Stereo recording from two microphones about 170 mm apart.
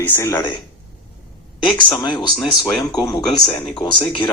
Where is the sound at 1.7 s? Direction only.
25° left (ahead or behind).